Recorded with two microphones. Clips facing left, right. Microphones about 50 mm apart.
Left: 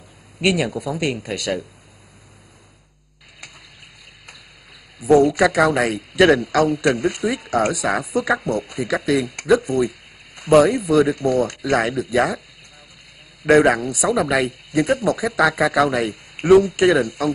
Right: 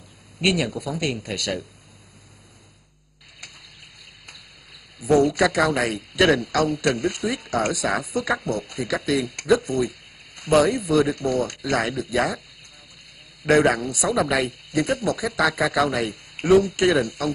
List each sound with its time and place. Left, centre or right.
0.4 s a man's voice: centre
5.0 s a man's voice: centre
13.5 s a man's voice: centre